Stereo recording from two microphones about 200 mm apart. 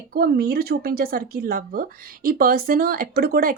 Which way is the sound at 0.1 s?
50° right (ahead or behind).